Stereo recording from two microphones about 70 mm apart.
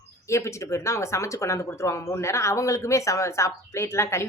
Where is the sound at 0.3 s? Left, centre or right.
Left.